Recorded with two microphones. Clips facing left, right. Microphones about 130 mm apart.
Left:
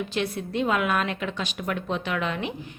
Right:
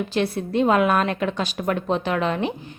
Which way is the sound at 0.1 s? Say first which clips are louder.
Right 5 dB; 35° right (ahead or behind).